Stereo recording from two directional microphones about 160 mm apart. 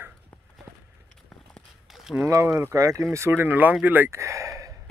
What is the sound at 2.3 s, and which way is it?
Speech, 15° right (ahead or behind).